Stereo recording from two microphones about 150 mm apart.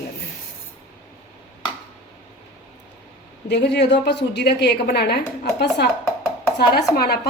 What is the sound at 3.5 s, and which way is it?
A woman's voice, 90° left.